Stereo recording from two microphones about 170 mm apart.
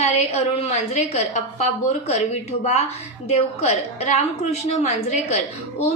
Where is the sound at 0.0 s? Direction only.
40° left (ahead or behind).